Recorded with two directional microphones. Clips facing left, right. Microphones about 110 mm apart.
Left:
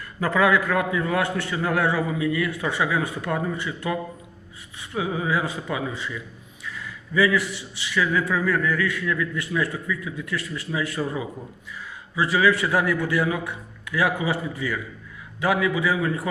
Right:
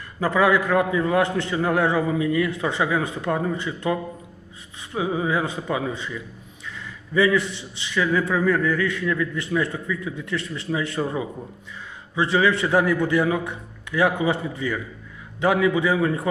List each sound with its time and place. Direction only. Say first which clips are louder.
0.3 s a man's voice: right 1 dB; 25° right (ahead or behind)
4.9 s a man's voice: right 2 dB; 30° right (ahead or behind)